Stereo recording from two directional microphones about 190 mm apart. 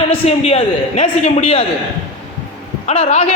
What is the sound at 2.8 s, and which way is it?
Speech, 30° left (ahead or behind).